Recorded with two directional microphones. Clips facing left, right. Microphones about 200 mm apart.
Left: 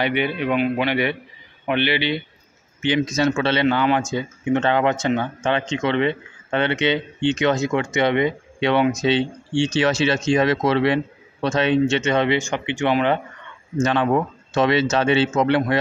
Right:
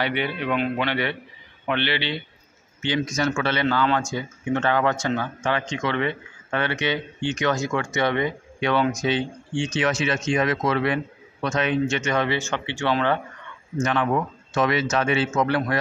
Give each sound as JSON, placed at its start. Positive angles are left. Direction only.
{"t": 0.0, "sound": "speech", "side_deg": 15}